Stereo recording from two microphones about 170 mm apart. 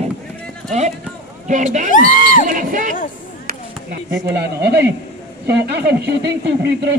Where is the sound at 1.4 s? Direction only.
45° right (ahead or behind).